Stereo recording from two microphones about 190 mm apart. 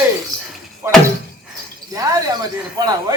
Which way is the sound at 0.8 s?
15° right (ahead or behind).